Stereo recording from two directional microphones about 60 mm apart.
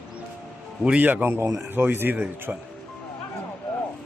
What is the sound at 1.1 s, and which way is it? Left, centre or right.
Speech, right.